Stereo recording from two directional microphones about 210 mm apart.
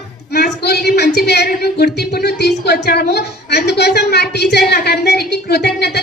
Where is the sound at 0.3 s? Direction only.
50° left (ahead or behind).